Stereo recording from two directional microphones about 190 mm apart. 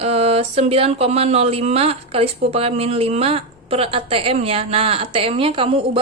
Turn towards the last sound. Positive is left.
turn(degrees=-30)  # may be behind; listen again after turning